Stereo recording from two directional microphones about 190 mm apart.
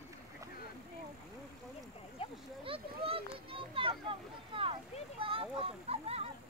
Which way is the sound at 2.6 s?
30° right (ahead or behind).